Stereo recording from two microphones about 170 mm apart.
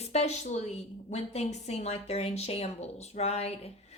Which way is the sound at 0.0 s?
40° left (ahead or behind).